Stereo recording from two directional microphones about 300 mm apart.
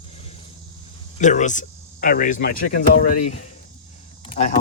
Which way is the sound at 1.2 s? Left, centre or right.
Left.